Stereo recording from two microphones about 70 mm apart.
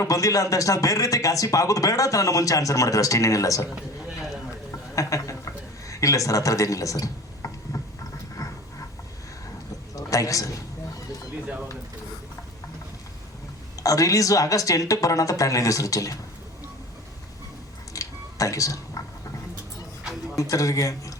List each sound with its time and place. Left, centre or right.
0.0 s a man's voice: left
4.9 s a man's voice: left
8.4 s a sound: left
9.9 s a sound: left
13.8 s a man's voice: left
17.9 s music: left
20.3 s a man's voice: left